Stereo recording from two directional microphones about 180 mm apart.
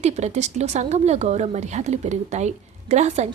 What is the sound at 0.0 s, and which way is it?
A woman's voice, 40° right (ahead or behind).